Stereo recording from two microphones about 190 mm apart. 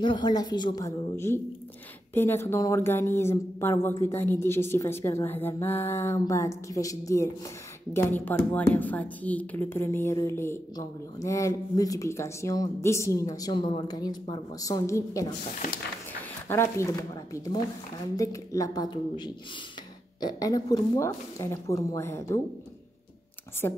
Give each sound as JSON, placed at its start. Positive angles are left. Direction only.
{"t": 0.0, "sound": "a woman's voice", "side_deg": 20}
{"t": 16.4, "sound": "a woman's voice", "side_deg": 15}
{"t": 23.6, "sound": "a woman's voice", "side_deg": 15}